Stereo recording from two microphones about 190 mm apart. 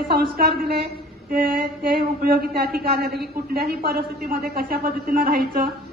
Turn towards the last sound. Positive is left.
turn(degrees=-50)  # may be behind; listen again after turning